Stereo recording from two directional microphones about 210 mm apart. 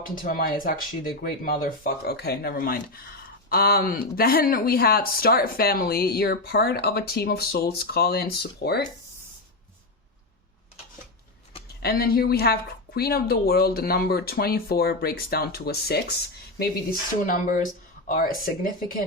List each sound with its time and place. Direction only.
0.0 s speech: 40° left (ahead or behind)
11.8 s speech: 45° left (ahead or behind)
17.2 s speech: 40° left (ahead or behind)